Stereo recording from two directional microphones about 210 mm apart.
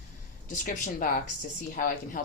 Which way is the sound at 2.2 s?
40° left (ahead or behind).